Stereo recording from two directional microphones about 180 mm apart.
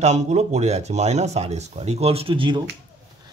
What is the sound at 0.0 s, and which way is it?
A man's voice, 40° right (ahead or behind).